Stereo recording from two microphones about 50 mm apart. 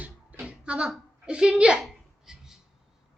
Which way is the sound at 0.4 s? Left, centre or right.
Right.